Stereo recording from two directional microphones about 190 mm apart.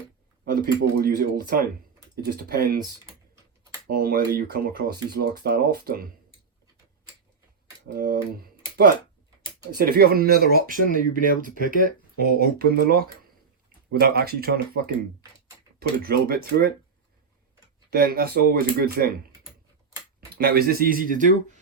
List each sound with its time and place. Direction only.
0.9 s speech: 55° right (ahead or behind)
3.8 s speech: 50° right (ahead or behind)
7.9 s speech: 50° right (ahead or behind)
9.7 s speech: 50° right (ahead or behind)
17.9 s speech: 55° right (ahead or behind)
20.3 s speech: 55° right (ahead or behind)